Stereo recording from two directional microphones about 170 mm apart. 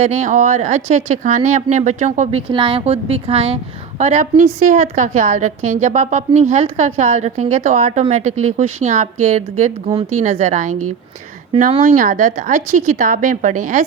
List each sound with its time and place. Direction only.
0.0 s a woman's voice: 45° right (ahead or behind)
2.5 s a woman's voice: 30° right (ahead or behind); by 10.8 s 45° right (ahead or behind)
11.8 s a woman's voice: 50° right (ahead or behind)